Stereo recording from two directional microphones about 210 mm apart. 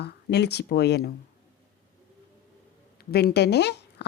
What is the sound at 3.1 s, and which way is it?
Speech, 50° left (ahead or behind).